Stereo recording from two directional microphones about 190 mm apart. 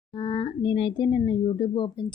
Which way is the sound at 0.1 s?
25° left (ahead or behind).